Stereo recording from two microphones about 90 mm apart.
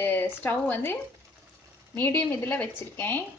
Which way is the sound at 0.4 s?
20° left (ahead or behind).